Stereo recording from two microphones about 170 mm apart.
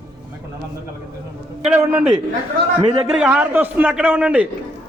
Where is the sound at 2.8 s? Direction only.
25° right (ahead or behind).